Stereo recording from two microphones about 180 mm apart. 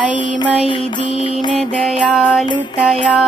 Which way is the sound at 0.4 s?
30° left (ahead or behind).